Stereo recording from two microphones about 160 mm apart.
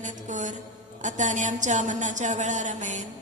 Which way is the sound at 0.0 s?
50° right (ahead or behind).